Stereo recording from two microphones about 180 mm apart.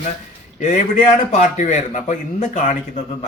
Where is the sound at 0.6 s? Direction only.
45° left (ahead or behind).